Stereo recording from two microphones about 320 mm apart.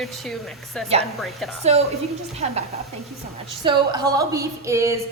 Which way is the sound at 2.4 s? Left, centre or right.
Centre.